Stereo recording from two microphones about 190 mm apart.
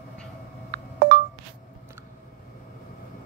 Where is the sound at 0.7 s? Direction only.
55° right (ahead or behind).